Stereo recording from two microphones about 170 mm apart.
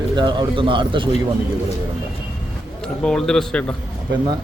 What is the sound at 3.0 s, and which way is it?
Speech, 5° left (ahead or behind).